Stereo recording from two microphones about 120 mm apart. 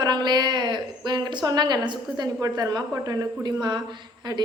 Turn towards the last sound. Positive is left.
turn(degrees=-35)  # may be behind; listen again after turning